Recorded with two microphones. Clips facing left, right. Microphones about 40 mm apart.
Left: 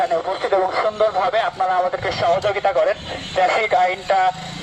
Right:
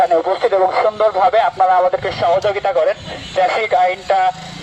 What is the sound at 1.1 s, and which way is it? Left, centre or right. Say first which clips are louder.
Speech: right 6 dB; centre.